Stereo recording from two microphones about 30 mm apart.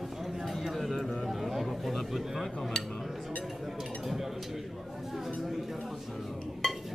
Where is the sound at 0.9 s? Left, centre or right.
Centre.